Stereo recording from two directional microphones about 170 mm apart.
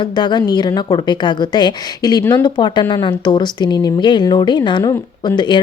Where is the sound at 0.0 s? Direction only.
25° left (ahead or behind).